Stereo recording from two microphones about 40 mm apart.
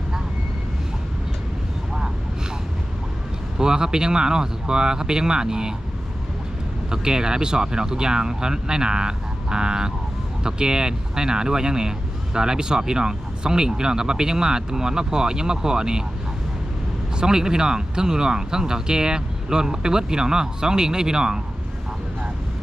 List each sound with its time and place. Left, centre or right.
3.6 s speech: centre
6.9 s speech: centre
17.2 s speech: centre